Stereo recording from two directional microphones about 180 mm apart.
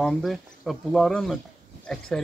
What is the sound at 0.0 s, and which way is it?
Speech, centre (ahead or behind).